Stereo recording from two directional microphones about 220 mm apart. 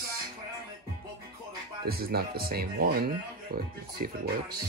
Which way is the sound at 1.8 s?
45° right (ahead or behind).